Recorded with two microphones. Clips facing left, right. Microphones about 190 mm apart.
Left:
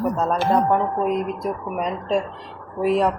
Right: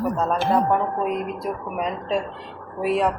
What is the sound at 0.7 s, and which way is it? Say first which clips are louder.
Speech: left 2 dB; 5° right (ahead or behind).